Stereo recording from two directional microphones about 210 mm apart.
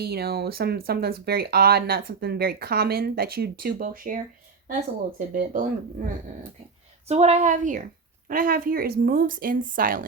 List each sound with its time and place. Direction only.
0.0 s speech: 50° right (ahead or behind)
5.3 s speech: 40° right (ahead or behind)
7.1 s speech: 30° right (ahead or behind)